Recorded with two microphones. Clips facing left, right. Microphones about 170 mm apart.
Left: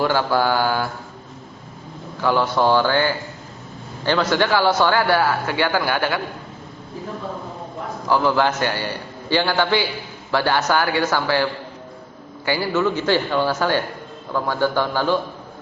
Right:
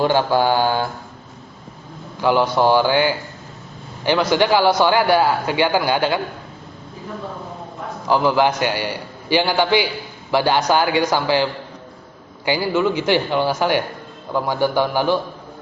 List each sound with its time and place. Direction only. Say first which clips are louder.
0.0 s mantra: right 2 dB; 20° right (ahead or behind)
2.2 s a man's voice: right 2 dB; 15° right (ahead or behind)
8.0 s a man's voice: right 2 dB; 15° right (ahead or behind)
12.5 s a man's voice: right 2 dB; 15° right (ahead or behind)